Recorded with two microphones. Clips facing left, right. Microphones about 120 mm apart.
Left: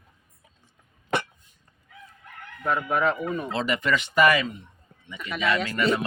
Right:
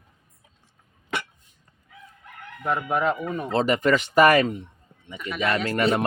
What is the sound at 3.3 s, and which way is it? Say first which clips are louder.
Speech: right 4 dB; 40° right (ahead or behind).